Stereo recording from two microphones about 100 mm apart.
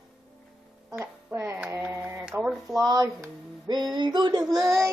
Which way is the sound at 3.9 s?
45° right (ahead or behind).